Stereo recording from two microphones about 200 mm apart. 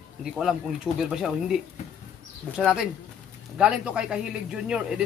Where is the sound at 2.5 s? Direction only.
Centre (ahead or behind).